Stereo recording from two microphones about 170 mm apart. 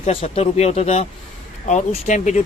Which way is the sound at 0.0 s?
35° left (ahead or behind).